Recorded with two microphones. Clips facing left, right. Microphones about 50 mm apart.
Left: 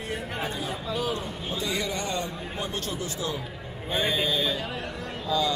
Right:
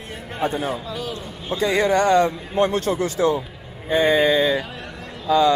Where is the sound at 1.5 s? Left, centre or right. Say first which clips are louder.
Right 13 dB; right.